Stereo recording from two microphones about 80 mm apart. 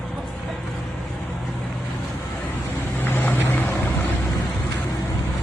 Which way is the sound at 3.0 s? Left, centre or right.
Left.